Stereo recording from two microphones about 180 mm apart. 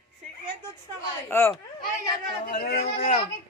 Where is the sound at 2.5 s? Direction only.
55° left (ahead or behind).